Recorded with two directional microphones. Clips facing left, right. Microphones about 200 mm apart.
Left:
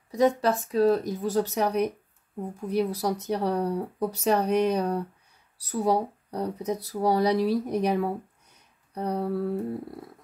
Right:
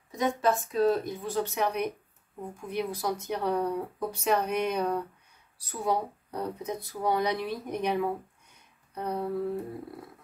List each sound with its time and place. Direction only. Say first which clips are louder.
0.2 s speech: left 4 dB; 35° left (ahead or behind)